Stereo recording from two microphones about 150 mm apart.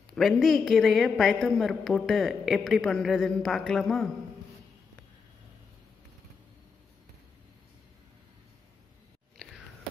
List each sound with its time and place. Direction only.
0.1 s a woman's voice: centre (ahead or behind)
9.4 s biting: centre (ahead or behind)